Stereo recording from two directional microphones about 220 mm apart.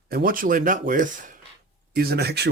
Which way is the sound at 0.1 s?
40° right (ahead or behind).